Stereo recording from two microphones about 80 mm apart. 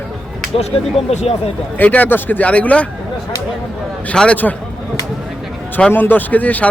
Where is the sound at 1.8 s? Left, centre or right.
Left.